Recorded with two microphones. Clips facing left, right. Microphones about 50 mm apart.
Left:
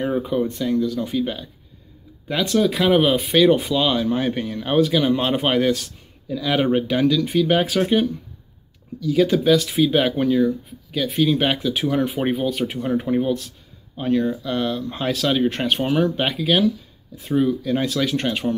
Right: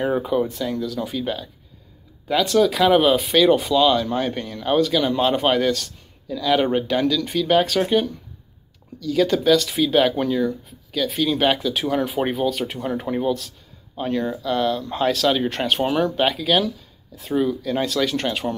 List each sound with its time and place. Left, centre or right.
0.1 s speech: centre
3.8 s speech: centre
9.0 s speech: centre